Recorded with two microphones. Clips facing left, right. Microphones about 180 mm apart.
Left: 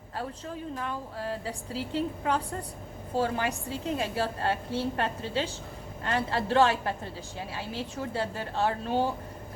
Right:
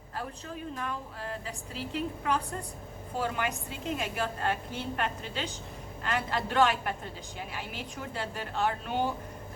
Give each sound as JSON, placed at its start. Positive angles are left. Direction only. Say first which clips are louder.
{"t": 1.5, "sound": "a woman's voice", "louder": "left 4 dB", "side_deg": 30}